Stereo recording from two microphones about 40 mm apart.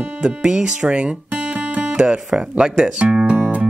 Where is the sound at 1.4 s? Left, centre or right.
Right.